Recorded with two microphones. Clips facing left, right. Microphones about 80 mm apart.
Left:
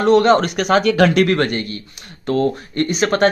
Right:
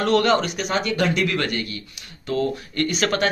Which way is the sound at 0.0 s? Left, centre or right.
Left.